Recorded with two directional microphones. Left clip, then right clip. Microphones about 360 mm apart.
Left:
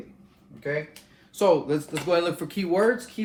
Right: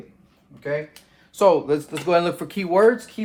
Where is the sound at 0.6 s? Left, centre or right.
Centre.